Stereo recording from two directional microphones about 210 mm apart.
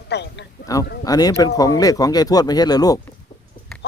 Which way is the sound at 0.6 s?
15° left (ahead or behind).